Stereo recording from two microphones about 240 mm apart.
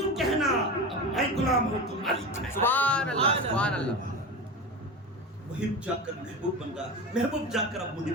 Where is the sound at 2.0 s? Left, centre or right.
Centre.